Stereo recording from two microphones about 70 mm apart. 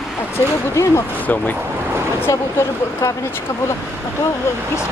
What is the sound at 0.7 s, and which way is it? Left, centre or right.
Speech, left.